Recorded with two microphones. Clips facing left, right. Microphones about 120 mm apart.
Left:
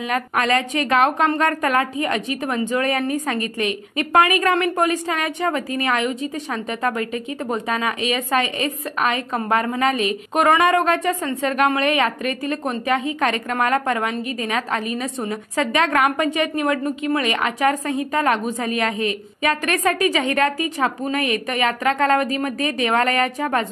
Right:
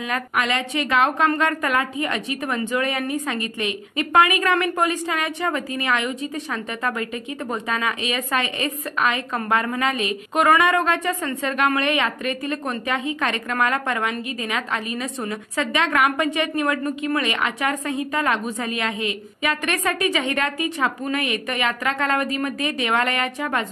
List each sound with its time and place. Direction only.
0.1 s a woman's voice: 35° left (ahead or behind)